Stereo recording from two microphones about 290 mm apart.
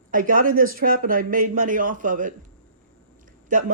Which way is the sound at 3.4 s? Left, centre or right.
Right.